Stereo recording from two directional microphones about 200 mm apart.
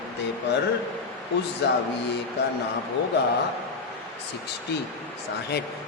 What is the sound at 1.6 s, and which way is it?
Speech, 60° left (ahead or behind).